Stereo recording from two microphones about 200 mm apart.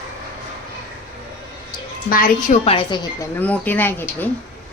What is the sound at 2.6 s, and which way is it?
Speech, 25° left (ahead or behind).